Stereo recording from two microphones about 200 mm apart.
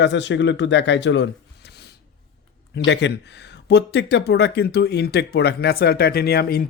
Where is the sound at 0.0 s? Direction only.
60° left (ahead or behind).